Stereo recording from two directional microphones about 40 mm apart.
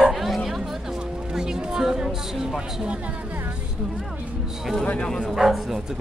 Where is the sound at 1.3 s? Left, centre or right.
Centre.